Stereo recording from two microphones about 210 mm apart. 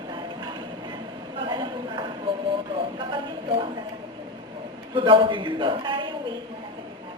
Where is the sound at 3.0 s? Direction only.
25° right (ahead or behind).